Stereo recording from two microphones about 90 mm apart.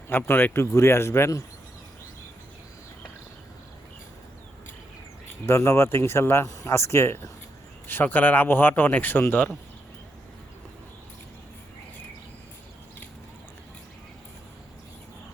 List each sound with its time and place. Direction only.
0.1 s speech: 25° left (ahead or behind)
5.5 s speech: 30° left (ahead or behind)